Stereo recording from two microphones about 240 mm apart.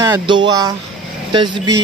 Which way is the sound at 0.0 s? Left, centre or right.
Centre.